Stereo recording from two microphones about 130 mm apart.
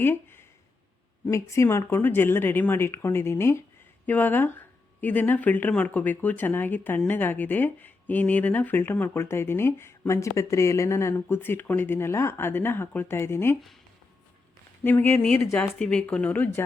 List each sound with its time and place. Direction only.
0.0 s speech: 15° left (ahead or behind)
14.8 s speech: 15° left (ahead or behind)